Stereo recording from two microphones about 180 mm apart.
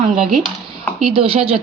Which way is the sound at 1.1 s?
30° right (ahead or behind).